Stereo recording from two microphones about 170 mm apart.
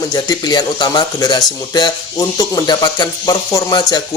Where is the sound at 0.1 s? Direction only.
25° left (ahead or behind).